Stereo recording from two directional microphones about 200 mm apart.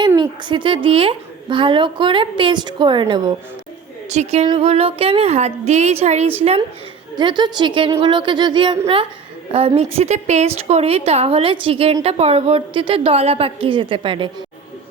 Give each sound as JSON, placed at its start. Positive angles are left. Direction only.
{"t": 0.2, "sound": "a woman's voice", "side_deg": -25}
{"t": 4.1, "sound": "a woman's voice", "side_deg": -35}